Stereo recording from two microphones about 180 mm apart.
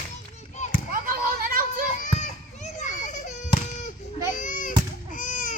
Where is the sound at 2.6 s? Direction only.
40° left (ahead or behind).